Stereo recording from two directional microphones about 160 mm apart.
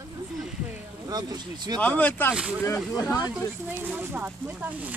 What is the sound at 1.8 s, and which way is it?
Speech, 10° left (ahead or behind).